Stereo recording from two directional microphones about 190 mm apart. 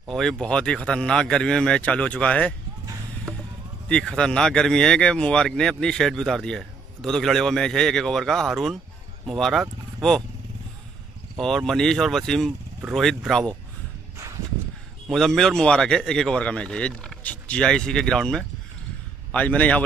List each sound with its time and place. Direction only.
0.1 s speech: centre (ahead or behind)
3.9 s speech: 5° left (ahead or behind)
11.3 s speech: centre (ahead or behind)
15.0 s speech: centre (ahead or behind)